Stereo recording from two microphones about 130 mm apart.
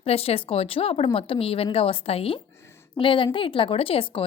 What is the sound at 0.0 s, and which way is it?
A woman's voice, 50° left (ahead or behind).